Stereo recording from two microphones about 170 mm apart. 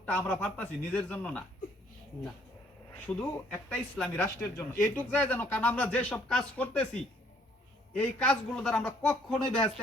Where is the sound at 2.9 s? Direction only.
10° left (ahead or behind).